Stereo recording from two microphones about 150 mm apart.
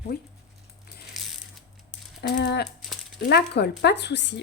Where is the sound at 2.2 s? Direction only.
90° left.